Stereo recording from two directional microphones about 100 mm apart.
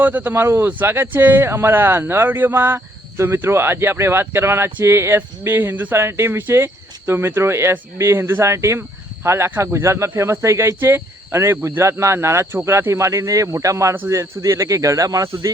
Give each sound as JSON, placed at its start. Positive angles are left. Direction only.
{"t": 0.0, "sound": "speech", "side_deg": -15}